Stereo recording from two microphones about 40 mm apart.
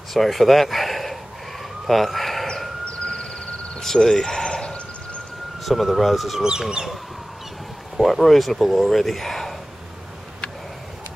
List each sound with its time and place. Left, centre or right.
0.1 s speech: centre
1.9 s emergency vehicle: centre
2.9 s a sound: left
3.8 s a sound: centre
5.7 s speech: centre
6.4 s speech: centre
8.0 s speech: centre